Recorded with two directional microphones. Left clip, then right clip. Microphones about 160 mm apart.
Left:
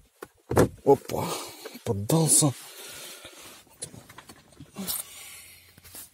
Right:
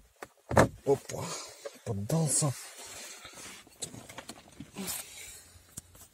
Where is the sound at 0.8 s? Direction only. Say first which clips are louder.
Left 8 dB; 65° left (ahead or behind); by 2.5 s 90° left.